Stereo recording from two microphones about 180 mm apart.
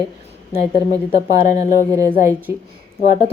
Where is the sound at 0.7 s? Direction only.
25° left (ahead or behind).